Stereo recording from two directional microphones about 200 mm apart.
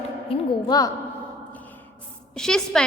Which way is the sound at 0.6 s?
20° left (ahead or behind).